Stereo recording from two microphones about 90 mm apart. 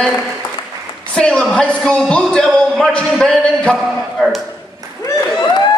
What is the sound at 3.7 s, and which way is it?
Speech, centre (ahead or behind).